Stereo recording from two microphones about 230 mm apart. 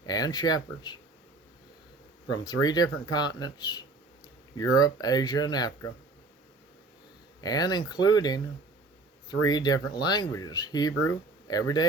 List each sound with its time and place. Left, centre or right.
0.0 s speech: centre
2.3 s speech: centre
7.4 s speech: centre